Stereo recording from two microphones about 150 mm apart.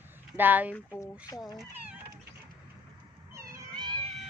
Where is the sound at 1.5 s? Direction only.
10° right (ahead or behind).